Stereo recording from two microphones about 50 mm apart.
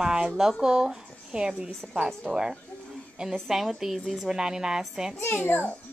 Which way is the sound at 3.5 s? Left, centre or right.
Centre.